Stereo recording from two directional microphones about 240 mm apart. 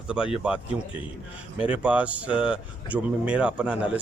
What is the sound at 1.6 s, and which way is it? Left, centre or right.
A man's voice, centre.